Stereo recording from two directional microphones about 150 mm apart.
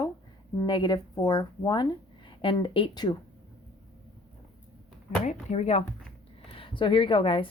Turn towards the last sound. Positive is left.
turn(degrees=35)  # may be behind; listen again after turning